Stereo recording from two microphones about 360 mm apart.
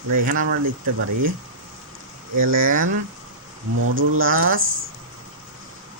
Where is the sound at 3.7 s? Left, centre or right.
Right.